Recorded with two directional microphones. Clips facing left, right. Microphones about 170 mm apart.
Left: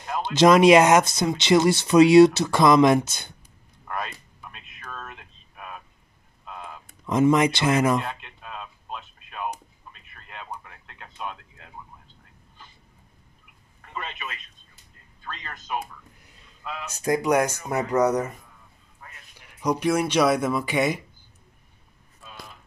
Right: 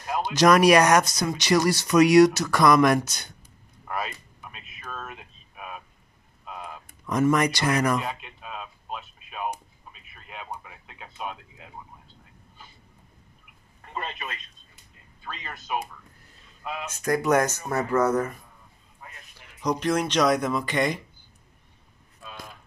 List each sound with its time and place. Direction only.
0.2 s speech: 25° left (ahead or behind)
3.8 s a sound: 5° right (ahead or behind)
7.1 s speech: 20° left (ahead or behind)
8.0 s radio: 5° right (ahead or behind)
13.7 s telephone: 35° right (ahead or behind)
15.2 s speech: 10° right (ahead or behind)
16.9 s speech: 25° left (ahead or behind)
17.2 s speech: 10° left (ahead or behind)
19.6 s speech: 10° left (ahead or behind)